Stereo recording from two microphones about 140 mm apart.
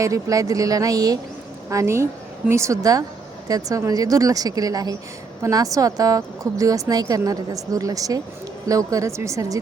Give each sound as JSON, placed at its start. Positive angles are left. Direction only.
{"t": 0.0, "sound": "speech", "side_deg": -25}